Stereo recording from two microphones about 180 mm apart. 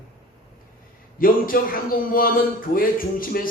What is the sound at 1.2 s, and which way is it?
A man's voice, 50° left (ahead or behind).